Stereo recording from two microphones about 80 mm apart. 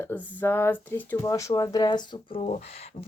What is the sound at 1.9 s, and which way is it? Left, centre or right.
Speech, left.